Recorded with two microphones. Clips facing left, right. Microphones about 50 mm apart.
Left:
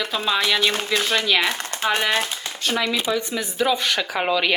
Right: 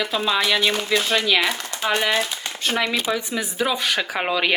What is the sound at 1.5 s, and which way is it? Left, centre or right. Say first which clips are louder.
Speech: left 1 dB; left.